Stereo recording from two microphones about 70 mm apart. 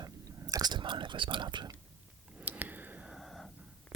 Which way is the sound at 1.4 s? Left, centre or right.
Right.